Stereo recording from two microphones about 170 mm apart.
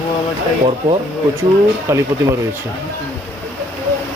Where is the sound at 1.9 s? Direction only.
15° right (ahead or behind).